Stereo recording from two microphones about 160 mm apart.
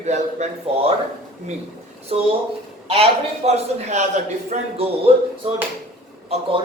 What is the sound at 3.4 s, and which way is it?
A man's voice, 45° right (ahead or behind).